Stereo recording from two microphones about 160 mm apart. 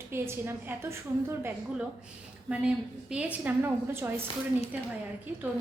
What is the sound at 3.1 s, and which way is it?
A woman's voice, 10° right (ahead or behind).